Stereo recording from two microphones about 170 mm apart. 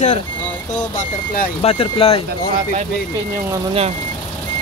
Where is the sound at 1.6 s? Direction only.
35° left (ahead or behind).